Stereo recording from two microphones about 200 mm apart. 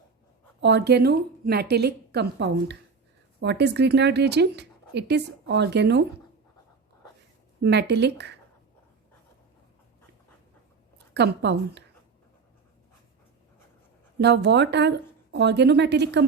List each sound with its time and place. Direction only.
0.6 s speech: 55° right (ahead or behind)
7.6 s speech: 55° right (ahead or behind)
10.9 s a woman's voice: 60° right (ahead or behind)
14.2 s speech: 60° right (ahead or behind)